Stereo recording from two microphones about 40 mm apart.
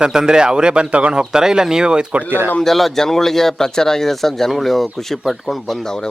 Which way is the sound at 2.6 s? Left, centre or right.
Centre.